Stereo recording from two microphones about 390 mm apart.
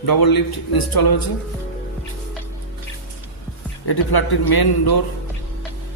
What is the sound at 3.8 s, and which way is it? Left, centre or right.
A man's voice, left.